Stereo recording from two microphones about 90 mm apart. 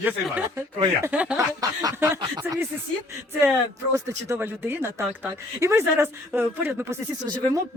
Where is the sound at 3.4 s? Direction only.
25° right (ahead or behind).